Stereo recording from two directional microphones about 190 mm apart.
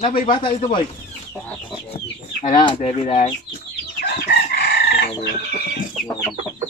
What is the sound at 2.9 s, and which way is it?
Speech, 35° left (ahead or behind).